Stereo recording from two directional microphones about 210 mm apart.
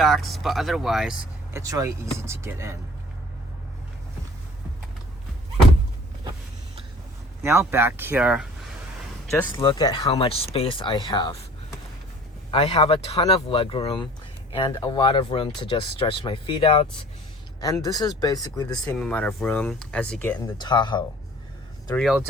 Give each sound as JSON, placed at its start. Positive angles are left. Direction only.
{"t": 0.0, "sound": "speech", "side_deg": 0}
{"t": 1.5, "sound": "speech", "side_deg": -15}
{"t": 7.4, "sound": "speech", "side_deg": -10}
{"t": 9.5, "sound": "speech", "side_deg": 20}
{"t": 12.5, "sound": "speech", "side_deg": 25}
{"t": 20.6, "sound": "speech", "side_deg": 20}
{"t": 21.9, "sound": "speech", "side_deg": 0}